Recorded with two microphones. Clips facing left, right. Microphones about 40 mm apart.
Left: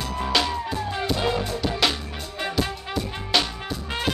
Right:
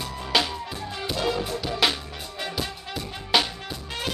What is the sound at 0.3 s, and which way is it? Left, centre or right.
Music, centre.